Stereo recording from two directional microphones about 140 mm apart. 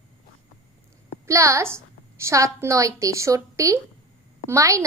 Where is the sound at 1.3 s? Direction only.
20° right (ahead or behind).